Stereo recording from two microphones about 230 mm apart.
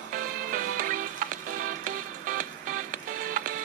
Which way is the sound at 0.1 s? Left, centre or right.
Right.